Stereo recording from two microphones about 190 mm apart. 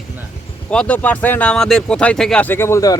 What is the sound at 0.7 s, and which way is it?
Speech, 5° left (ahead or behind).